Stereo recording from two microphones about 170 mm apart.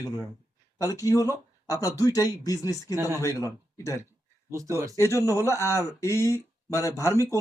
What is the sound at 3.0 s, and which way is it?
Speech, 15° right (ahead or behind).